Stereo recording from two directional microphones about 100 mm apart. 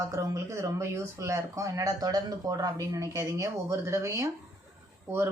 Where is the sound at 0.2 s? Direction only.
30° right (ahead or behind).